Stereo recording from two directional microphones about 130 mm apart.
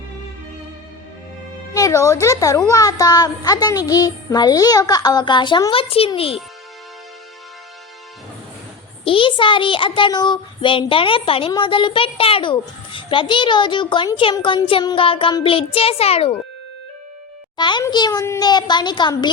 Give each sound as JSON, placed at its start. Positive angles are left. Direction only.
{"t": 1.7, "sound": "a child's voice", "side_deg": 25}
{"t": 6.1, "sound": "child singing", "side_deg": 45}
{"t": 9.0, "sound": "a child's voice", "side_deg": 40}
{"t": 14.3, "sound": "child singing", "side_deg": 40}
{"t": 17.6, "sound": "a sound", "side_deg": 35}
{"t": 17.8, "sound": "a child's voice", "side_deg": 30}